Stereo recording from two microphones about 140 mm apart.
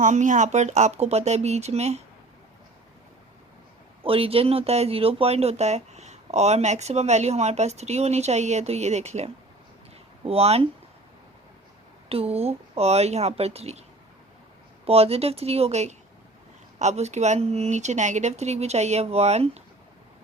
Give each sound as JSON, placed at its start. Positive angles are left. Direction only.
{"t": 0.0, "sound": "speech", "side_deg": -65}
{"t": 4.0, "sound": "speech", "side_deg": -40}
{"t": 12.0, "sound": "speech", "side_deg": -45}
{"t": 14.8, "sound": "speech", "side_deg": -45}